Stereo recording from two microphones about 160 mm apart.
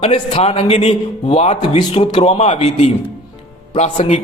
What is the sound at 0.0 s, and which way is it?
A man's voice, 35° left (ahead or behind).